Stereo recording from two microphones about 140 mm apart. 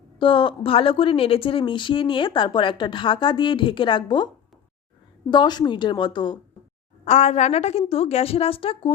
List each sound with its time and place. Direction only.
0.2 s a woman's voice: 35° left (ahead or behind)
5.3 s a woman's voice: 30° left (ahead or behind)
7.0 s a woman's voice: 55° left (ahead or behind)